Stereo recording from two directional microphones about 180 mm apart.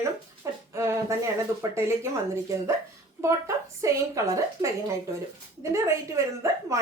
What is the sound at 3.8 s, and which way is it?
A woman's voice, 15° right (ahead or behind).